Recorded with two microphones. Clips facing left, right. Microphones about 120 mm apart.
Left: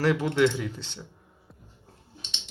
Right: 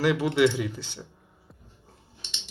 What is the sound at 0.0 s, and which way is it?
Speech, 10° right (ahead or behind).